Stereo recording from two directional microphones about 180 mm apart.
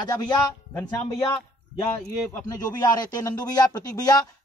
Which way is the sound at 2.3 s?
20° left (ahead or behind).